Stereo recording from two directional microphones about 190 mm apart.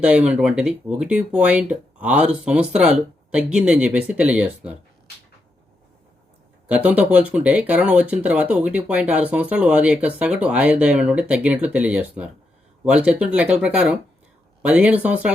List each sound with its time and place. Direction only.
0.0 s speech: 5° right (ahead or behind)
6.7 s speech: 5° right (ahead or behind)